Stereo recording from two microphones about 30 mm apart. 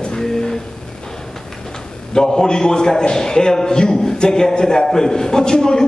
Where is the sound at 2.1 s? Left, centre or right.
Left.